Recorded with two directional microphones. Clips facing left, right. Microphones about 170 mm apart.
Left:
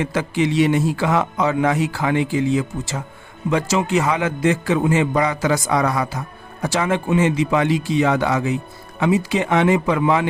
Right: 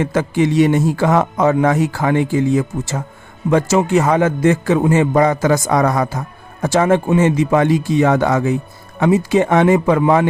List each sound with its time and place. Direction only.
0.0 s a man's voice: 50° right (ahead or behind)